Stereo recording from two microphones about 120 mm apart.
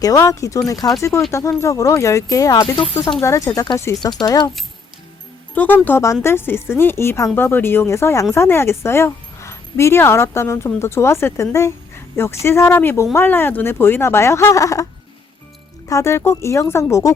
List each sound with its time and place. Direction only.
0.0 s speech: 30° left (ahead or behind)
5.5 s speech: 15° left (ahead or behind)
15.9 s speech: 25° left (ahead or behind)